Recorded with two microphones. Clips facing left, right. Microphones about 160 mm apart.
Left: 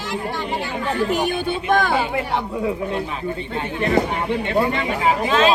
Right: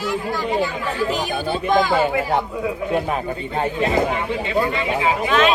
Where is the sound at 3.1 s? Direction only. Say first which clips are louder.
Right 2 dB; 40° right (ahead or behind).